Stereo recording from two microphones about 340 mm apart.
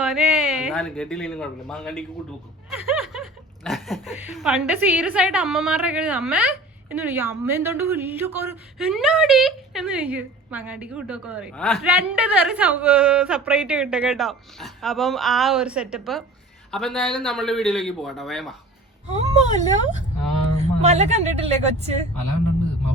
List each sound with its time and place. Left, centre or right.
0.0 s a man's voice: centre
19.0 s speech: centre